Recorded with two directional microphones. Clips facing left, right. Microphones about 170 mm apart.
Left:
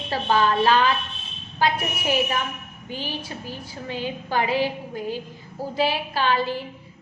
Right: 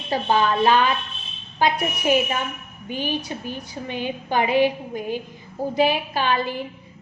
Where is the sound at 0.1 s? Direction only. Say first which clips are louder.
Right 1 dB; 20° right (ahead or behind).